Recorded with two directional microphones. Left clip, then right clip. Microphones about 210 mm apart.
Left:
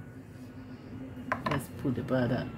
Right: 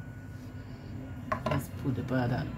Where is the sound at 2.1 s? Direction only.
30° left (ahead or behind).